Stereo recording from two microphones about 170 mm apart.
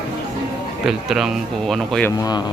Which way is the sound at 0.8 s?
Centre (ahead or behind).